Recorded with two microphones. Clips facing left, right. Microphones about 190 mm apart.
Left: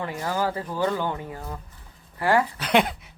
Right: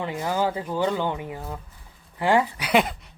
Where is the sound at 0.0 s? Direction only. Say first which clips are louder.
Right 2 dB; 15° right (ahead or behind).